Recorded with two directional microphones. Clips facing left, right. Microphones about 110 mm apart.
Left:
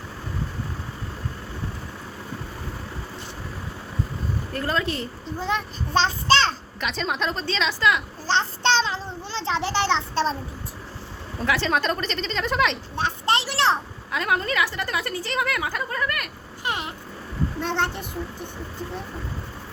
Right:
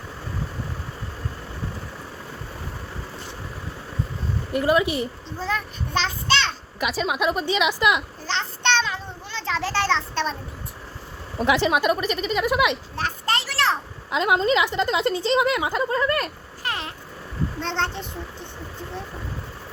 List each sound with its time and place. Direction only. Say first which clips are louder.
4.5 s speech: right 7 dB; 15° right (ahead or behind)
5.4 s a child's voice: left 1 dB; 20° left (ahead or behind)
5.9 s a child's voice: left 4 dB; 35° left (ahead or behind)
6.7 s speech: right 7 dB; 10° right (ahead or behind)
8.3 s child singing: left 2 dB; 30° left (ahead or behind)
11.3 s speech: right 3 dB; 15° right (ahead or behind)
13.0 s a sound: left 5 dB; 25° left (ahead or behind)
14.1 s a woman's voice: right 5 dB; 20° right (ahead or behind)
16.6 s a sound: left 1 dB; 15° left (ahead or behind)
17.6 s a child's voice: left 1 dB; 10° left (ahead or behind)